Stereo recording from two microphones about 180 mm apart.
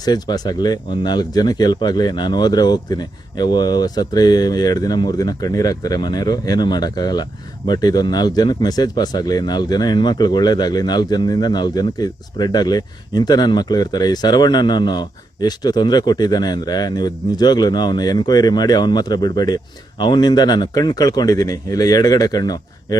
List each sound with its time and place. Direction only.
0.0 s speech: 20° left (ahead or behind)